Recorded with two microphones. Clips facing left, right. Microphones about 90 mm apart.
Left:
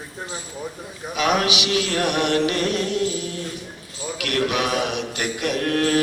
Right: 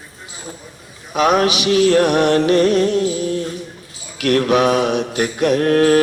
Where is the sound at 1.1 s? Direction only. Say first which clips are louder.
Right 6 dB; 40° right (ahead or behind).